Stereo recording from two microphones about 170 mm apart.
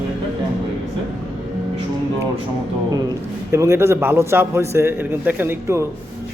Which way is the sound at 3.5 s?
15° right (ahead or behind).